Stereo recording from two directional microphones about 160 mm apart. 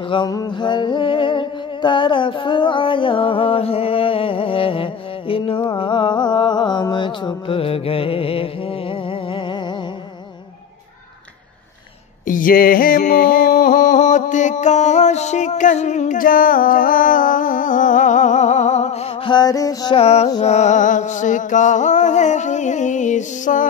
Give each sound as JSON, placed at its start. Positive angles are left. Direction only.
{"t": 0.1, "sound": "music", "side_deg": 25}
{"t": 12.3, "sound": "a sound", "side_deg": 60}
{"t": 20.0, "sound": "music", "side_deg": 40}